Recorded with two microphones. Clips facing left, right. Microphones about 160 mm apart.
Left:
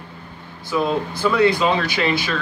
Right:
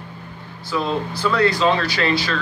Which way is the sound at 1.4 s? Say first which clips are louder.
Even; 15° left (ahead or behind).